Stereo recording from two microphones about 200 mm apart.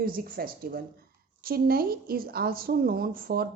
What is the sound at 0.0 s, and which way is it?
A woman's voice, 45° right (ahead or behind).